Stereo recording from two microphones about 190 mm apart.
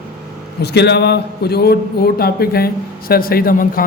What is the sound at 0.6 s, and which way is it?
A man's voice, 60° left (ahead or behind).